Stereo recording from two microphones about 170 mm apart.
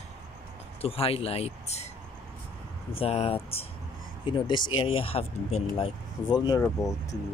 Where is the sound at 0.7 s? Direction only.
35° left (ahead or behind).